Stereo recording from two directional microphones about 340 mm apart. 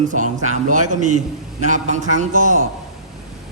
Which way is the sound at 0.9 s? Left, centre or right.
Right.